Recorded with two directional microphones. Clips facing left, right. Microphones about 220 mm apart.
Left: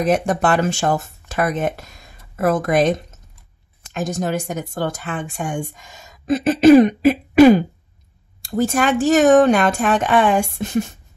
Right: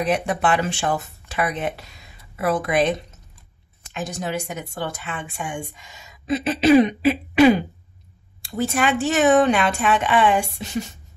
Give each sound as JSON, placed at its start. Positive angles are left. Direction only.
{"t": 0.0, "sound": "speech", "side_deg": 45}